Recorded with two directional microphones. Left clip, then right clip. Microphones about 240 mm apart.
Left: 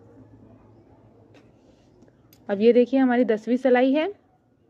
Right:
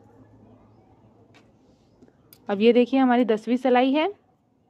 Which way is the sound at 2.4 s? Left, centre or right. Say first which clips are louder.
Left 1 dB; centre.